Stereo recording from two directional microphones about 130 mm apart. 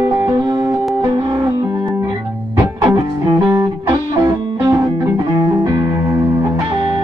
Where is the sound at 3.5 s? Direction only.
25° right (ahead or behind).